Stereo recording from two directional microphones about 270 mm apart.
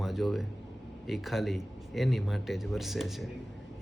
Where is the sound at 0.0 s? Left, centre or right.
Centre.